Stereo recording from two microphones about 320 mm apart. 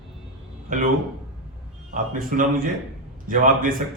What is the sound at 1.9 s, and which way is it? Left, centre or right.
A man's voice, right.